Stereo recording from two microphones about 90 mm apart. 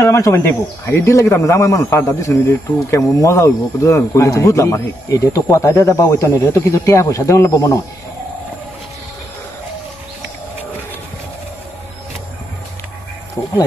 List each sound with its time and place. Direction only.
0.0 s speech: 35° left (ahead or behind)
13.4 s speech: 40° left (ahead or behind)